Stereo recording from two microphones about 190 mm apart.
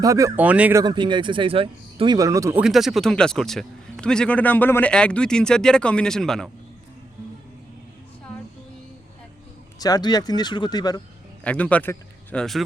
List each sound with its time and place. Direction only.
0.0 s speech: 15° right (ahead or behind)
2.6 s a man's voice: centre (ahead or behind)
9.7 s speech: 20° left (ahead or behind)
11.4 s speech: 5° left (ahead or behind)